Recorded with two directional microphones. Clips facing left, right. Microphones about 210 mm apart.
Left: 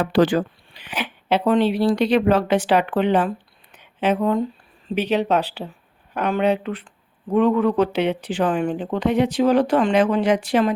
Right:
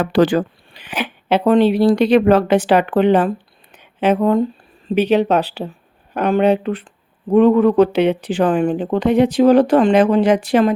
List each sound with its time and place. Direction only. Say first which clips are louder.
0.0 s speech: right 3 dB; 65° right (ahead or behind); by 10.8 s 45° right (ahead or behind)